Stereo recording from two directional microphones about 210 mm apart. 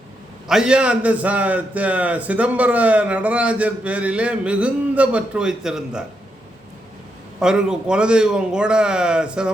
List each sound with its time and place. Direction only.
0.4 s a man's voice: 5° right (ahead or behind)
7.3 s a man's voice: 5° right (ahead or behind)